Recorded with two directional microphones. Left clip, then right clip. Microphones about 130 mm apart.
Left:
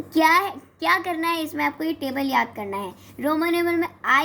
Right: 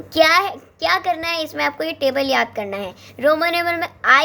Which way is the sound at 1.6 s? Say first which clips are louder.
Right 5 dB; 65° right (ahead or behind).